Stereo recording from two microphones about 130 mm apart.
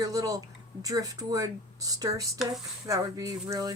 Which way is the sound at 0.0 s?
25° right (ahead or behind).